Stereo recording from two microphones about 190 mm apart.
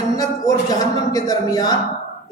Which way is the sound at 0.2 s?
20° left (ahead or behind).